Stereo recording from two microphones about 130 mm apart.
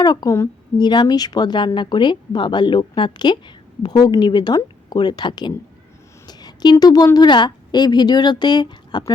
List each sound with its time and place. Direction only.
0.0 s a woman's voice: 30° left (ahead or behind)